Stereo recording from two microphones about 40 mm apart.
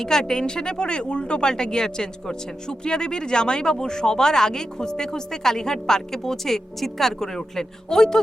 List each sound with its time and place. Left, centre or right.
0.0 s speech: centre